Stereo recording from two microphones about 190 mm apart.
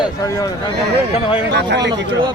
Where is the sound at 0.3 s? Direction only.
20° left (ahead or behind).